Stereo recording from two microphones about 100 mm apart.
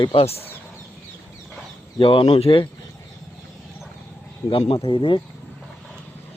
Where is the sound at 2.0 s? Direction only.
60° left (ahead or behind).